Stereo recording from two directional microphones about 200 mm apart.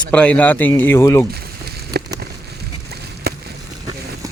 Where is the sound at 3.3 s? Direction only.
50° right (ahead or behind).